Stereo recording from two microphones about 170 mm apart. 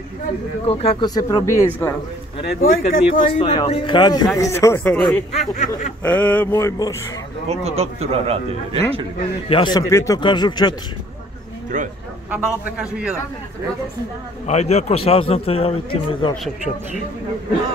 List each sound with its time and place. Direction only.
0.7 s a man's voice: 35° left (ahead or behind)
1.0 s speech: 20° left (ahead or behind)
2.4 s speech: 55° left (ahead or behind)
3.3 s speech: 30° left (ahead or behind); by 4.9 s 15° left (ahead or behind)
4.9 s speech: 5° left (ahead or behind)
5.3 s speech: 45° left (ahead or behind)
6.0 s speech: 10° left (ahead or behind)
7.4 s a man's voice: 40° right (ahead or behind)
9.5 s speech: 25° left (ahead or behind)
11.7 s speech: 45° right (ahead or behind)
12.3 s a man's voice: 5° right (ahead or behind)
14.4 s a man's voice: 40° left (ahead or behind)